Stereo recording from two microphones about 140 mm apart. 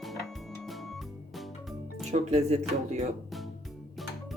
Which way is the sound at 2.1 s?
55° right (ahead or behind).